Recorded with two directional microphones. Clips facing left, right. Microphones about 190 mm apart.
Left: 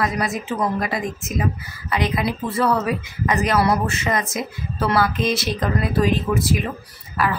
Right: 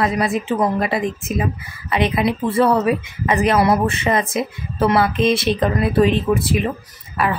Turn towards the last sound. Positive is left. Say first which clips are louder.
# right 2 dB
turn(degrees=-25)  # may be behind; listen again after turning